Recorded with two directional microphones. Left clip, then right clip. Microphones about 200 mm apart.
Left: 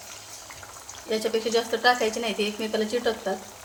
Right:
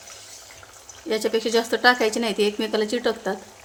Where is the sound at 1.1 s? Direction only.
60° right (ahead or behind).